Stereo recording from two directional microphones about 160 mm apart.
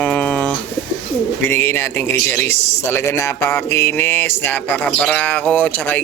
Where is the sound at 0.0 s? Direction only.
5° left (ahead or behind).